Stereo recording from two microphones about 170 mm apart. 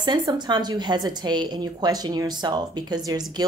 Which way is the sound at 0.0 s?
25° right (ahead or behind).